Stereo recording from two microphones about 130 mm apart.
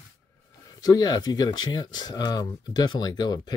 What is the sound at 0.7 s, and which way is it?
Speech, 30° left (ahead or behind).